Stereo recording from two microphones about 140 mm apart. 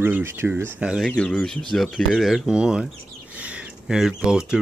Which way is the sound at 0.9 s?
5° left (ahead or behind).